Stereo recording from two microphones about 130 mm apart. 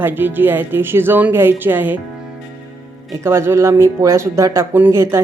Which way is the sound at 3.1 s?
20° right (ahead or behind).